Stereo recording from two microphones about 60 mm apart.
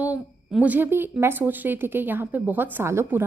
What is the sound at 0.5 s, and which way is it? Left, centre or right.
A woman's voice, right.